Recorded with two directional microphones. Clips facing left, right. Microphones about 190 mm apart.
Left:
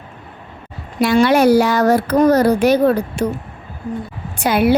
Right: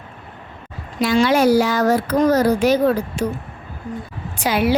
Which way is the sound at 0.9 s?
60° left (ahead or behind).